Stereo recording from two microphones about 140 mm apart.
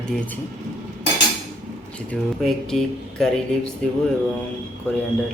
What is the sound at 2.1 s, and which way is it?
Speech, centre (ahead or behind).